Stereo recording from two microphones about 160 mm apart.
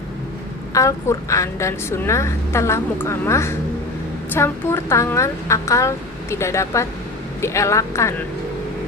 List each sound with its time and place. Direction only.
0.7 s a woman's voice: 20° left (ahead or behind)